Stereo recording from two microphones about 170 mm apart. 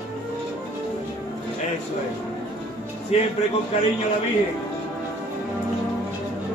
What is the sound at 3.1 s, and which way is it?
Speech, 40° left (ahead or behind).